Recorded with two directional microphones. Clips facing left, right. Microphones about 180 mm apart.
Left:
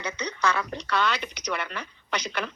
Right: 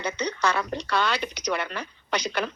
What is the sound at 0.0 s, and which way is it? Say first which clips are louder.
Speech: right 2 dB; 30° right (ahead or behind).